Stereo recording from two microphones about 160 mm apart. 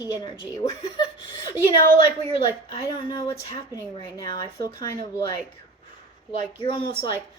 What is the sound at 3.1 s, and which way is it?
A woman's voice, 20° left (ahead or behind).